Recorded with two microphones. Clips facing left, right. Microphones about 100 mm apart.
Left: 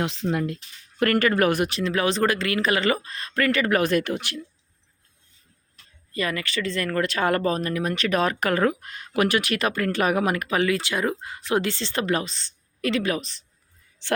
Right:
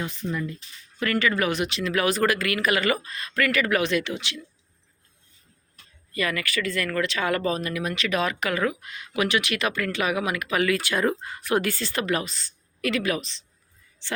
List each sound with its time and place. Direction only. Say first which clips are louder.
0.0 s speech: left 5 dB; 85° left
1.0 s speech: left 4 dB; 50° left (ahead or behind)
1.8 s speech: right 2 dB; 30° left (ahead or behind); by 4.4 s 50° left (ahead or behind)
6.1 s speech: even; 30° left (ahead or behind)